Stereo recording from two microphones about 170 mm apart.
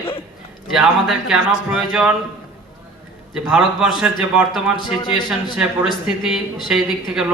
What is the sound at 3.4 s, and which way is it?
Speech, 5° right (ahead or behind).